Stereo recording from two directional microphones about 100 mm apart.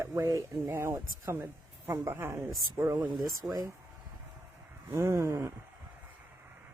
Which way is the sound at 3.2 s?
5° right (ahead or behind).